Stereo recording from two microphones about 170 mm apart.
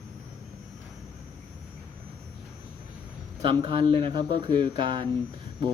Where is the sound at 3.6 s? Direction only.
30° right (ahead or behind).